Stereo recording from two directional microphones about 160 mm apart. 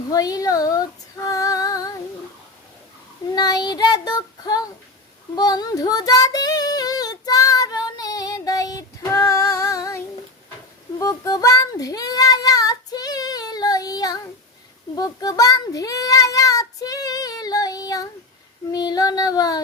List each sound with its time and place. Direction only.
0.1 s female singing: 20° left (ahead or behind)
3.3 s child singing: 25° left (ahead or behind)
11.0 s child singing: 20° left (ahead or behind)
14.9 s a child's voice: 25° left (ahead or behind)
18.7 s child singing: 25° left (ahead or behind)